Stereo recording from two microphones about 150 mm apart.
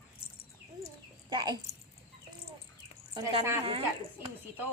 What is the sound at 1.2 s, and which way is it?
Speech, 30° right (ahead or behind).